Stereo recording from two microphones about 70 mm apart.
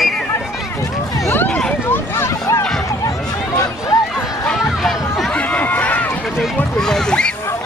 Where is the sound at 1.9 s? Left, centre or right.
Left.